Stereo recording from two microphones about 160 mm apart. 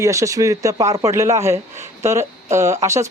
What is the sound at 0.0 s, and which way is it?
Speech, 20° right (ahead or behind).